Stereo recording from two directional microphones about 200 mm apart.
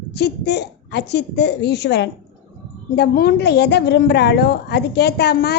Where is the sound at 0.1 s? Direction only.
55° left (ahead or behind).